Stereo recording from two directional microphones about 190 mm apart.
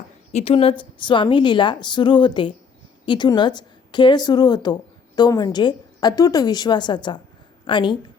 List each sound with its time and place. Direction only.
0.3 s a woman's voice: 30° left (ahead or behind)